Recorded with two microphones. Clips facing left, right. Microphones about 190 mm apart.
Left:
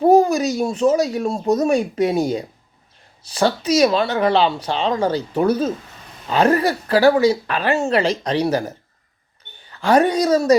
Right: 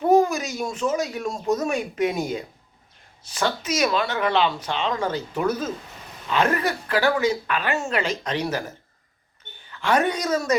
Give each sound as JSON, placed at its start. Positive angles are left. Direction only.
{"t": 0.0, "sound": "speech", "side_deg": 35}
{"t": 9.7, "sound": "speech", "side_deg": 35}